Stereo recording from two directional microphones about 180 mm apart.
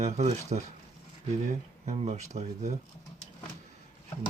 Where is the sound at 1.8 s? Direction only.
40° right (ahead or behind).